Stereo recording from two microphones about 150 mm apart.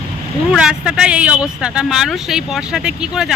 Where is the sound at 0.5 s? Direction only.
5° right (ahead or behind).